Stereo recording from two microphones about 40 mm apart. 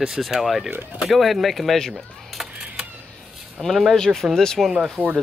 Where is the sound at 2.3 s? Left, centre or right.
Centre.